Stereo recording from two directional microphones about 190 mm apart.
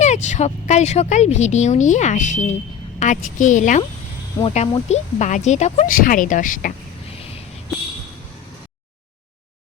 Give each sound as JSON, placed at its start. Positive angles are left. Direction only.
{"t": 0.0, "sound": "speech", "side_deg": 40}